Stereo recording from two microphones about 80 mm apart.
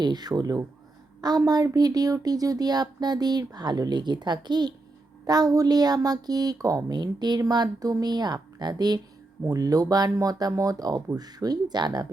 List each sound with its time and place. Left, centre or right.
0.0 s a woman's voice: right
5.2 s a woman's voice: right
9.5 s a woman's voice: right